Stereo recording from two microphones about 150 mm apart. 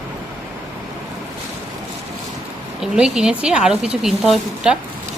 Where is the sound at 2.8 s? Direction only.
5° right (ahead or behind).